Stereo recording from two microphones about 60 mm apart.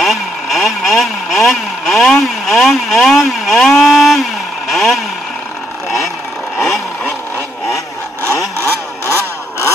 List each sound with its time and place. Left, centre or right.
0.0 s vehicle: centre
6.6 s vehicle: centre
9.0 s vehicle: left